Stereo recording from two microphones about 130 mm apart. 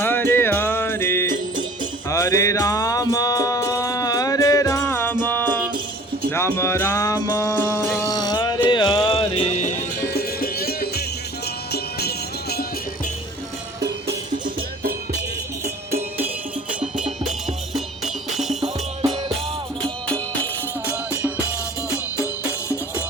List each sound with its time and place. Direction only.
0.0 s music: 15° left (ahead or behind); by 9.7 s 60° left (ahead or behind)